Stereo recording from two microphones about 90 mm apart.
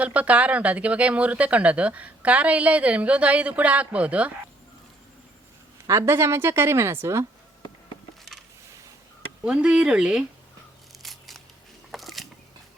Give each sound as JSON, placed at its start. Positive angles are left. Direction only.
{"t": 0.0, "sound": "speech", "side_deg": -15}
{"t": 5.9, "sound": "a woman's voice", "side_deg": -30}
{"t": 9.4, "sound": "speech", "side_deg": -10}
{"t": 11.0, "sound": "a sound", "side_deg": 0}
{"t": 11.9, "sound": "biting", "side_deg": 0}